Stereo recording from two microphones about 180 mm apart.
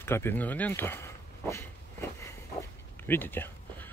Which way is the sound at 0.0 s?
15° left (ahead or behind).